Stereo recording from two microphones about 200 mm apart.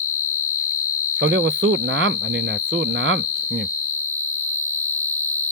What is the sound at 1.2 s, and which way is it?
Speech, 70° right (ahead or behind).